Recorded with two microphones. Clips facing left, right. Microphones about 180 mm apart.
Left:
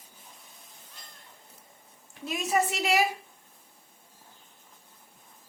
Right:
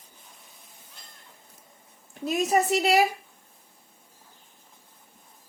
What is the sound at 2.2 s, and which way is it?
Speech, 40° right (ahead or behind).